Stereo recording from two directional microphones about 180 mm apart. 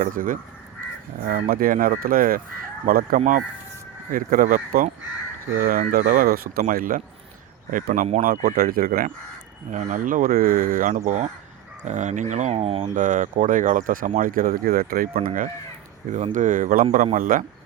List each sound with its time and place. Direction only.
0.0 s speech: 50° right (ahead or behind)
13.0 s speech: 45° right (ahead or behind)